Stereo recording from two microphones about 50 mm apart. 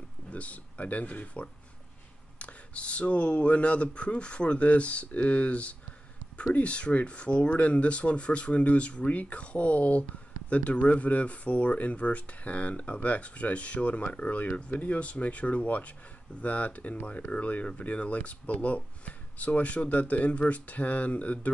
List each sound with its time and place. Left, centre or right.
0.3 s speech: left